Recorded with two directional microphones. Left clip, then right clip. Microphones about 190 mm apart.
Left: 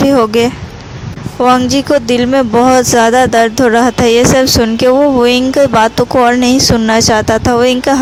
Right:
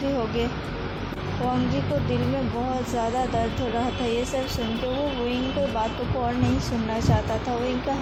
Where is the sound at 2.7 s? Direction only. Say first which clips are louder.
Left 16 dB; 50° left (ahead or behind).